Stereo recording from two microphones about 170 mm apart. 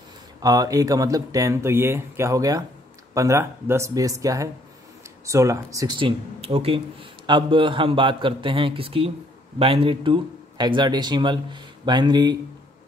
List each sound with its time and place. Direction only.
0.4 s speech: 20° right (ahead or behind)